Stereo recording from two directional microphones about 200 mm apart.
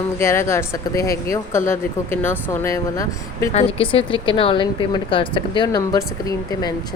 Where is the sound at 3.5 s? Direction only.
30° left (ahead or behind).